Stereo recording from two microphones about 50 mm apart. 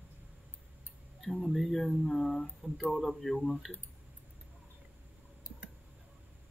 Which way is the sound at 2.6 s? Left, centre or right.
Right.